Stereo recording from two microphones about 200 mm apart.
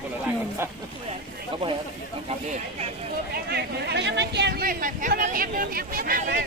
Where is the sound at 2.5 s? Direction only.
30° right (ahead or behind).